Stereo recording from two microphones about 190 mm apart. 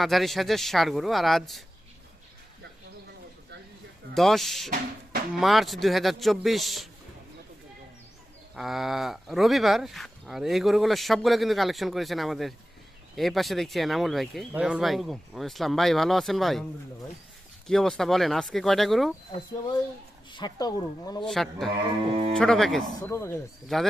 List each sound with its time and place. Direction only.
0.0 s speech: centre (ahead or behind)
4.1 s speech: centre (ahead or behind)
8.5 s speech: centre (ahead or behind)
17.7 s speech: centre (ahead or behind)
20.3 s speech: 20° left (ahead or behind)
21.2 s speech: centre (ahead or behind)
23.0 s speech: 15° left (ahead or behind)
23.6 s speech: centre (ahead or behind)